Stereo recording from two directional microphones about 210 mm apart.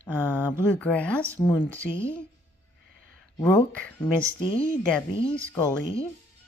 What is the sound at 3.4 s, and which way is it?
Speech, 10° left (ahead or behind).